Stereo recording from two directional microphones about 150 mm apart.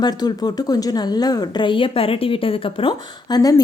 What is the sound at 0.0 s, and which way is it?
A woman's voice, 25° left (ahead or behind).